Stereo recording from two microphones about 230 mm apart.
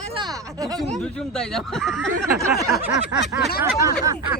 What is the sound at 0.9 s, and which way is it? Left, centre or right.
Speech, centre.